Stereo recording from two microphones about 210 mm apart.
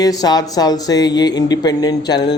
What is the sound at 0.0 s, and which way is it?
Speech, 15° left (ahead or behind).